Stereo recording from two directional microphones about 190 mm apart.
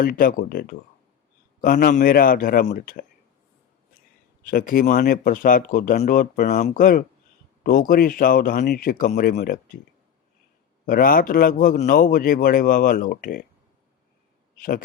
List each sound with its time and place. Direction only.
0.0 s speech: 50° left (ahead or behind)
4.4 s speech: 45° left (ahead or behind)
10.8 s speech: 50° left (ahead or behind)